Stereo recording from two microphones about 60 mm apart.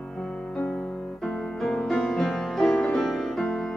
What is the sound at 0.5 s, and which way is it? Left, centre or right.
Music, left.